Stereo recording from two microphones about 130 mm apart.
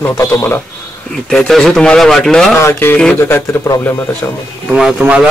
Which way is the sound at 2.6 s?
20° left (ahead or behind).